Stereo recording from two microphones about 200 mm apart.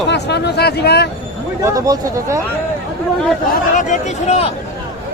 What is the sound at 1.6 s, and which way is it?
Speech, 15° right (ahead or behind).